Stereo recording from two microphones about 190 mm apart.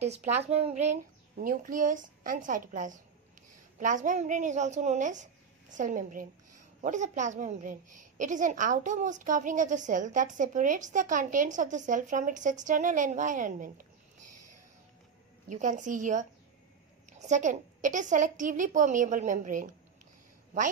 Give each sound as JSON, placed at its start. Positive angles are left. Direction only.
{"t": 0.0, "sound": "a woman's voice", "side_deg": -35}
{"t": 15.4, "sound": "a woman's voice", "side_deg": -40}